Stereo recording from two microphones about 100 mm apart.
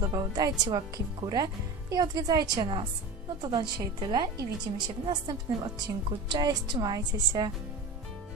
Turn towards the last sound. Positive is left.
turn(degrees=-45)  # may be behind; listen again after turning